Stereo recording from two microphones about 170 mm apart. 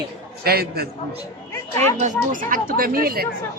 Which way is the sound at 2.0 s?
50° right (ahead or behind).